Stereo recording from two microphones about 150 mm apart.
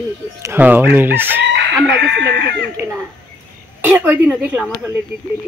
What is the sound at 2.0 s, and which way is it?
Speech, 90° right.